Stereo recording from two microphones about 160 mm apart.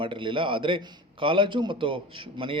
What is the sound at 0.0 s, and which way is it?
A man's voice, 30° right (ahead or behind).